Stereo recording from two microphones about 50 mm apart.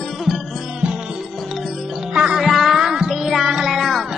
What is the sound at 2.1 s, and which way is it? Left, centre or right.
Music, centre.